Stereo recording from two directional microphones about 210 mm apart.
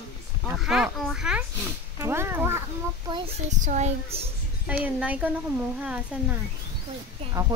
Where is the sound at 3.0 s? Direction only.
25° right (ahead or behind).